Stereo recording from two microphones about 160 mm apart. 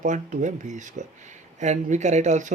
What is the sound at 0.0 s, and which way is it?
Speech, 50° right (ahead or behind).